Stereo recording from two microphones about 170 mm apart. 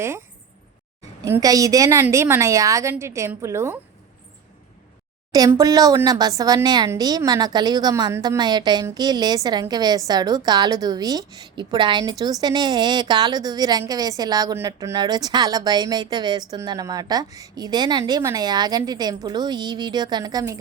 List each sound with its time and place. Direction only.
1.2 s a woman's voice: 20° right (ahead or behind)
5.5 s a woman's voice: 20° right (ahead or behind)